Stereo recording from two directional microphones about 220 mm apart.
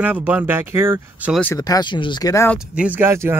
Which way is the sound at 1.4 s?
15° left (ahead or behind).